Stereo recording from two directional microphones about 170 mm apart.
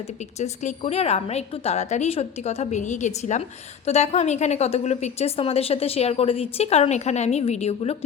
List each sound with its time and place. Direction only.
0.3 s a woman's voice: 40° left (ahead or behind)